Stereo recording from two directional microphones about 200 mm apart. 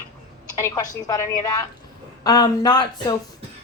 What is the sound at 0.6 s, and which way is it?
Speech, 20° left (ahead or behind).